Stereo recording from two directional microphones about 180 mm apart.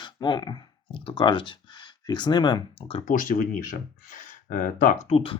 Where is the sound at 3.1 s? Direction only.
50° left (ahead or behind); by 5.4 s 30° left (ahead or behind).